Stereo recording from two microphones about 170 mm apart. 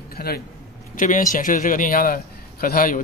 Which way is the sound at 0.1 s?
65° left (ahead or behind).